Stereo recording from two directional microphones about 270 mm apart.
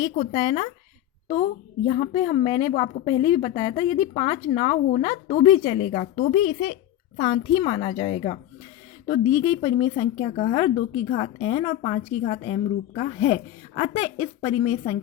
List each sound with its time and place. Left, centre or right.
0.2 s a woman's voice: left